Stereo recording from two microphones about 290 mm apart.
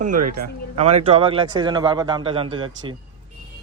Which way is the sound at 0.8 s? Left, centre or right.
Right.